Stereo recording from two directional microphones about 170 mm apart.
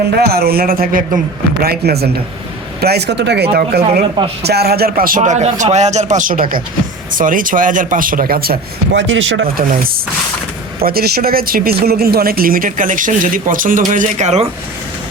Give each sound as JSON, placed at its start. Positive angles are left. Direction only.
{"t": 0.1, "sound": "speech", "side_deg": -70}
{"t": 10.8, "sound": "speech", "side_deg": -65}